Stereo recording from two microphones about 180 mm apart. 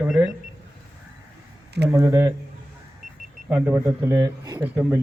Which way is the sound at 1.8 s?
15° right (ahead or behind).